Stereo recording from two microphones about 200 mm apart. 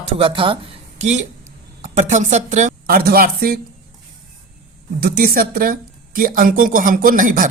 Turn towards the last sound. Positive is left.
turn(degrees=-40)  # may be behind; listen again after turning